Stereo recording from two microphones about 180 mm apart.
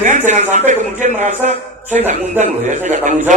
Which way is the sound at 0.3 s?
40° right (ahead or behind).